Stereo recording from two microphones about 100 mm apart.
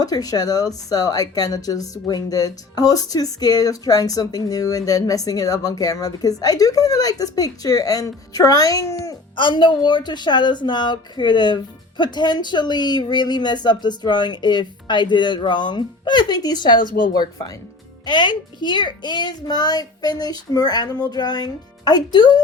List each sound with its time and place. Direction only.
0.0 s a woman's voice: 40° left (ahead or behind)
9.3 s a woman's voice: 55° left (ahead or behind)